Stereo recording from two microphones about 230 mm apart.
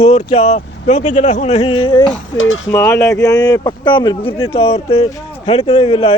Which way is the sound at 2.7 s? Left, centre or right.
Centre.